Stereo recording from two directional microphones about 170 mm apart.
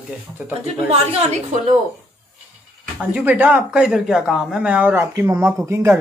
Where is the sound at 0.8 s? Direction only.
40° right (ahead or behind).